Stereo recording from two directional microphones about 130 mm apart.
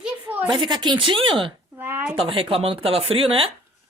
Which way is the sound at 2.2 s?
45° right (ahead or behind).